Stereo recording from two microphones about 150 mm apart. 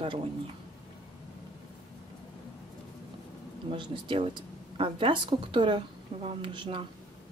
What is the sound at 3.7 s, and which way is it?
Speech, 35° right (ahead or behind).